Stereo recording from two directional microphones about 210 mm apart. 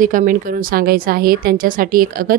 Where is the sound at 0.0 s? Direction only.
40° right (ahead or behind).